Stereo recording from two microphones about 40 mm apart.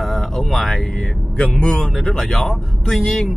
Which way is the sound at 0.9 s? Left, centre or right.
Left.